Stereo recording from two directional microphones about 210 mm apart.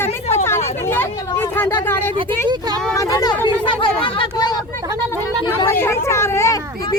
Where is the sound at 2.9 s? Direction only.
15° left (ahead or behind).